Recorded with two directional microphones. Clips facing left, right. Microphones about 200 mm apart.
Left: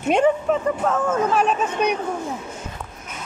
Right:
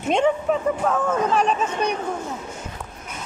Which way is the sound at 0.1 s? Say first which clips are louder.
Left 2 dB; centre (ahead or behind).